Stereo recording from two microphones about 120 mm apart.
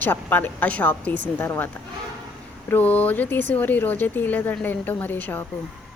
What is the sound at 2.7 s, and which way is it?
A woman's voice, 15° left (ahead or behind).